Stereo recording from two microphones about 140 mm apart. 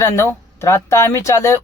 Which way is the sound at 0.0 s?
20° left (ahead or behind).